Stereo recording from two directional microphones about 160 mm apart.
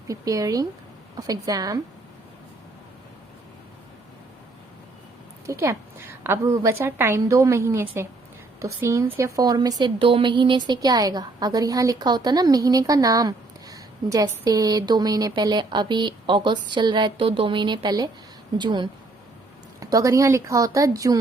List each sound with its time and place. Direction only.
0.1 s a woman's voice: 20° right (ahead or behind)
5.5 s a woman's voice: 20° right (ahead or behind)